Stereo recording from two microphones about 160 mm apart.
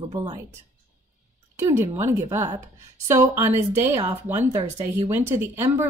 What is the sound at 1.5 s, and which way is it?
A woman's voice, 15° right (ahead or behind).